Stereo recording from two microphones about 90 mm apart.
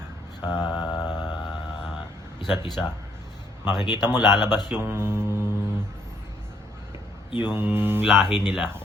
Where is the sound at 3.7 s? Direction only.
55° left (ahead or behind).